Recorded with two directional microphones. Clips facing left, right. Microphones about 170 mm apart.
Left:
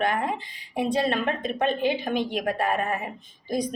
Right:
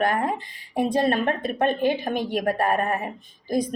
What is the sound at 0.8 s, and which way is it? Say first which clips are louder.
A woman's voice: right 3 dB; 50° right (ahead or behind).